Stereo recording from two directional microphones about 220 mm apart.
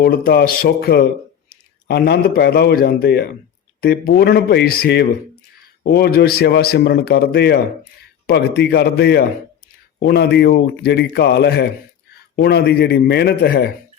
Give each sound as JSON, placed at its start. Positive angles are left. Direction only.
{"t": 0.0, "sound": "a man's voice", "side_deg": 45}